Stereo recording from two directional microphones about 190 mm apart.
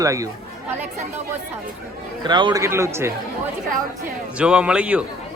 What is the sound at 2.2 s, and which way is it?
Speech, 25° right (ahead or behind).